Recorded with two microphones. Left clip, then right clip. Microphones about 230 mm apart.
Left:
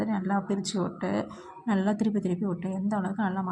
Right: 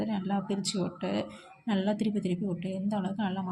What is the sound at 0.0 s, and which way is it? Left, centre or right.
Speech, centre.